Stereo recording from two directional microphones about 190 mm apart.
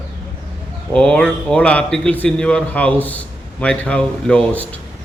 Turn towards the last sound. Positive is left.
turn(degrees=10)  # may be behind; listen again after turning